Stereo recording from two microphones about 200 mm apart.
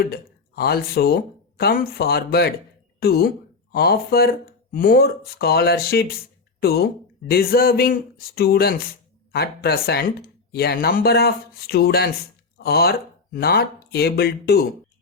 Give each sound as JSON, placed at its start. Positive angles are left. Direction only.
{"t": 0.0, "sound": "speech", "side_deg": 50}